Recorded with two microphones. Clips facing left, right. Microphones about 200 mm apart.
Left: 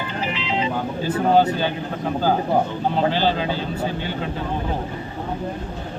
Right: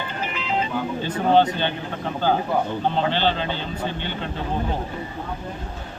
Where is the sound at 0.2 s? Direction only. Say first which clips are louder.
Left 2 dB; 50° right (ahead or behind).